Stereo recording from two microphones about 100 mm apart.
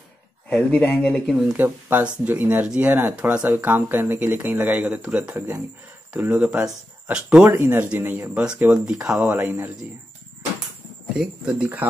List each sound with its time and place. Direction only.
0.7 s speech: 15° left (ahead or behind)
1.5 s speech: 20° right (ahead or behind)
7.5 s speech: 20° right (ahead or behind)
11.1 s speech: 10° right (ahead or behind)